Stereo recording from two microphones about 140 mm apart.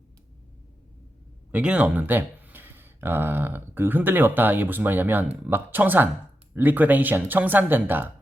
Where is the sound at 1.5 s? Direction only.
10° right (ahead or behind).